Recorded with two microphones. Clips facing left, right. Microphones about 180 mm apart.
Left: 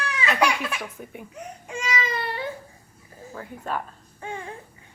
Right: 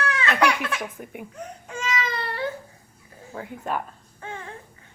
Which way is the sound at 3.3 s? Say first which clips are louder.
Right 2 dB; 10° right (ahead or behind).